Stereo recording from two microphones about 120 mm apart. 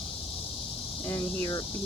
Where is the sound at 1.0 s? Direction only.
25° left (ahead or behind).